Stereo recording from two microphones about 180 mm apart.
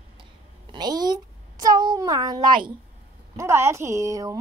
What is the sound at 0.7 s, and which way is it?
A woman's voice, 25° right (ahead or behind).